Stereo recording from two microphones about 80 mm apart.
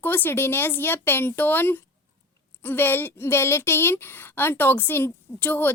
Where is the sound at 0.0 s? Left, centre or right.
Left.